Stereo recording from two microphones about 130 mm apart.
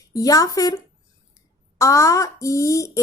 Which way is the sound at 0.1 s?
25° left (ahead or behind).